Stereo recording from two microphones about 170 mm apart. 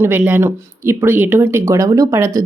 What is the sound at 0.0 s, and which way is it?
Speech, 10° right (ahead or behind).